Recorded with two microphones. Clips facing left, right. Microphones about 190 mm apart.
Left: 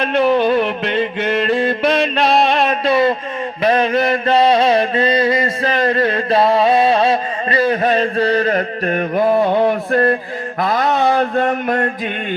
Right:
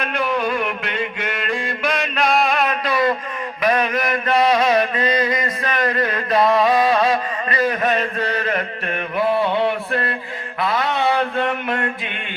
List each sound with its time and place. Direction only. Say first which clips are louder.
0.0 s music: left 8 dB; 30° left (ahead or behind)
3.6 s mantra: left 5 dB; 30° left (ahead or behind)
10.6 s a sound: left 4 dB; 45° left (ahead or behind)